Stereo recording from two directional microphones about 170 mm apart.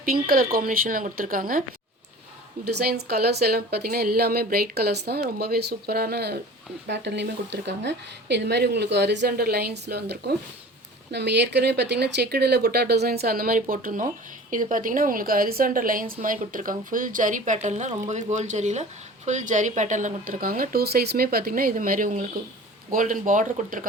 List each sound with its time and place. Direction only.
0.0 s speech: 60° right (ahead or behind)
2.6 s speech: 70° right (ahead or behind)
6.8 s speech: 90° right; by 10.3 s 70° right (ahead or behind)
11.1 s speech: 85° right; by 23.8 s 50° right (ahead or behind)